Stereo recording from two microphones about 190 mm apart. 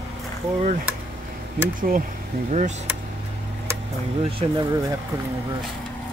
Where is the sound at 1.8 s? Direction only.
45° right (ahead or behind).